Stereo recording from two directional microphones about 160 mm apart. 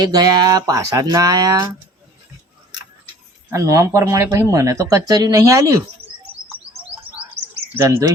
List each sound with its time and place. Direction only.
0.0 s speech: 25° right (ahead or behind)
3.5 s speech: 20° right (ahead or behind)
7.8 s speech: 20° right (ahead or behind)